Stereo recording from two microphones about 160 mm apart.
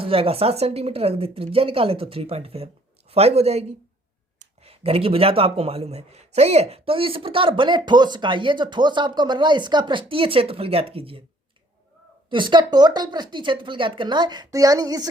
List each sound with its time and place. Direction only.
0.0 s speech: 35° right (ahead or behind)
12.3 s speech: 30° right (ahead or behind)